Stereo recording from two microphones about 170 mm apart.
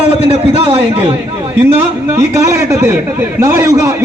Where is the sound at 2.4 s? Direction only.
15° right (ahead or behind).